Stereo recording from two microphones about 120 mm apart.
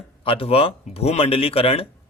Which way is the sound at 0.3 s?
50° left (ahead or behind).